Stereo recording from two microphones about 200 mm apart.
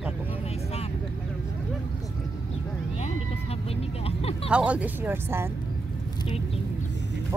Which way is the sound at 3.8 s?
30° left (ahead or behind).